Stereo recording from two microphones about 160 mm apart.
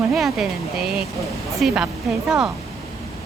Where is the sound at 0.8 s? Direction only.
75° right (ahead or behind).